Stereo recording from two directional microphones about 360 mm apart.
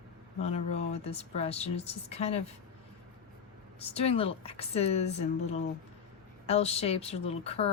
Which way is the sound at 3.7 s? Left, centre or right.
Centre.